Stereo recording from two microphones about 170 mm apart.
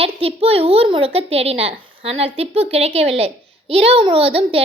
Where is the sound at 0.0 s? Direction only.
35° right (ahead or behind).